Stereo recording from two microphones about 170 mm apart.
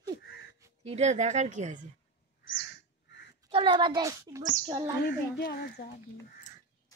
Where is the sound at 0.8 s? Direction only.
40° right (ahead or behind).